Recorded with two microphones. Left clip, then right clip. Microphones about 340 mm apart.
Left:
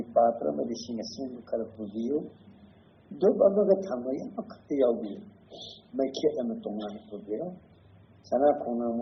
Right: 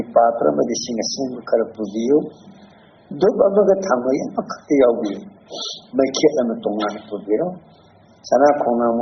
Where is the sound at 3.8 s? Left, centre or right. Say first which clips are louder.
Right 14 dB; right.